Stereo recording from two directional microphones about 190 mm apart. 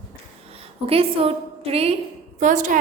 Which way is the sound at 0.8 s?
30° right (ahead or behind).